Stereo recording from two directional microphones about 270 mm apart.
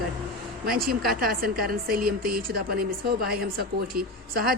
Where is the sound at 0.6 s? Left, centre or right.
Right.